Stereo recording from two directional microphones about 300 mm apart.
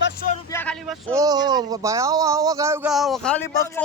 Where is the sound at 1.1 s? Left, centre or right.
Centre.